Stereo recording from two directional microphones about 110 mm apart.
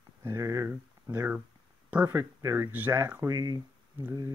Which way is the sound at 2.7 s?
15° right (ahead or behind).